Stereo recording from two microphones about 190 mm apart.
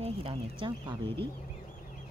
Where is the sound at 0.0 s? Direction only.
30° right (ahead or behind).